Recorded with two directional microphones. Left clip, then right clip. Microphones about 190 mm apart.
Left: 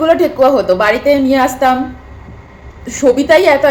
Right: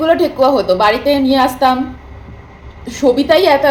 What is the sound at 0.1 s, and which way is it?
A woman's voice, centre (ahead or behind).